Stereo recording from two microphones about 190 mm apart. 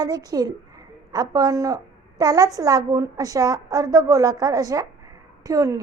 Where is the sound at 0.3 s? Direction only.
20° right (ahead or behind).